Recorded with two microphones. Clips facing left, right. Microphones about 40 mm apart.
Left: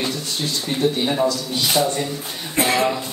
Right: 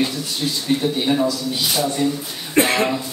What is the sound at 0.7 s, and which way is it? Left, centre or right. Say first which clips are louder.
Speech: left 1 dB; left.